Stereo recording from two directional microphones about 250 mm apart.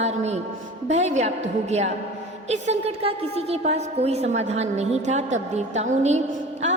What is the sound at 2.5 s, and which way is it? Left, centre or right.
A woman's voice, right.